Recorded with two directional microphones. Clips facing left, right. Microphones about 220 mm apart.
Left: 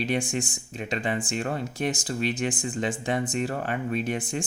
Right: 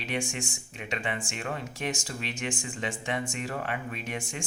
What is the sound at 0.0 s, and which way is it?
Speech, 35° left (ahead or behind).